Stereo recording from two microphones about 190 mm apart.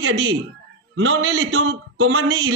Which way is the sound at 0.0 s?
90° right.